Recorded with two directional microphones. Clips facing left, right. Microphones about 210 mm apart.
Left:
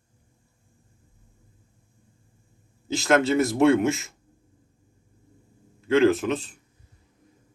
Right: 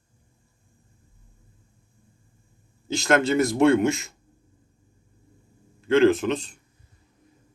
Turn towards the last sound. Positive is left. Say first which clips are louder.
# right 1 dB
turn(degrees=5)  # may be behind; listen again after turning